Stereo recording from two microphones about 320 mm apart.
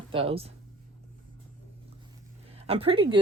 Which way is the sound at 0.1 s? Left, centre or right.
Centre.